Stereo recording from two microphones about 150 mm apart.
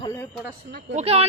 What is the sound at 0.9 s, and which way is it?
Speech, 45° right (ahead or behind).